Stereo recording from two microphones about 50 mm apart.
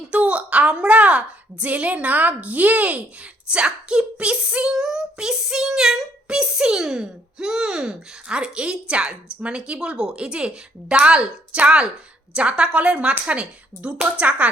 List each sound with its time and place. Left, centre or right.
0.1 s a woman's voice: right